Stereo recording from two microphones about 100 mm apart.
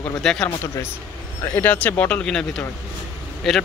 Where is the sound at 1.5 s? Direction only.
20° left (ahead or behind).